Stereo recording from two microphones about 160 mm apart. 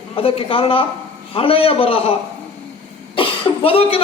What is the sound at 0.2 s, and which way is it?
A man's voice, 35° left (ahead or behind).